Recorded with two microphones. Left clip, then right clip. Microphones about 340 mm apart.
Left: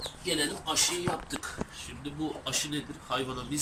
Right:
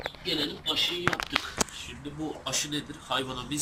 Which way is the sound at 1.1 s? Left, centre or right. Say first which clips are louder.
Right 7 dB; right.